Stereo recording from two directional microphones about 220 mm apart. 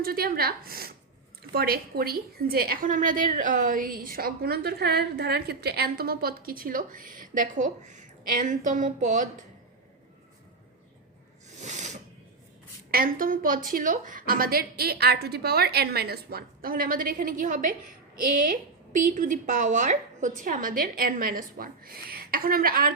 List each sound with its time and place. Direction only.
0.0 s a woman's voice: 45° right (ahead or behind)
11.4 s a sound: 30° right (ahead or behind)
12.9 s a woman's voice: 40° right (ahead or behind)
19.1 s a woman's voice: 35° right (ahead or behind)